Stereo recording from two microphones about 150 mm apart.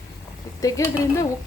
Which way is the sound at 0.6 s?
20° left (ahead or behind).